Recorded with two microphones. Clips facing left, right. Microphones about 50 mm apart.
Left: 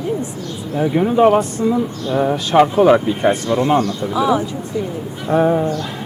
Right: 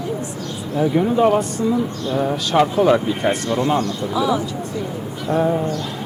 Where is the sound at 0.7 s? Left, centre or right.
Centre.